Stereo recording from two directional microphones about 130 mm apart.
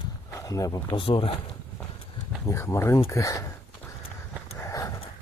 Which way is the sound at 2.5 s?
20° left (ahead or behind).